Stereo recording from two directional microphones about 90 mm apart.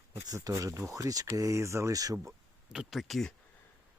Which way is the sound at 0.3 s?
40° right (ahead or behind).